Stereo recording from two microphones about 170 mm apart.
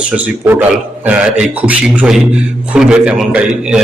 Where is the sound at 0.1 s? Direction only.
10° right (ahead or behind).